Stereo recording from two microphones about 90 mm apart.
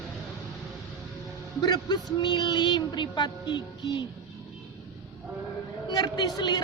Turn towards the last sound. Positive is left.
turn(degrees=50)  # may be behind; listen again after turning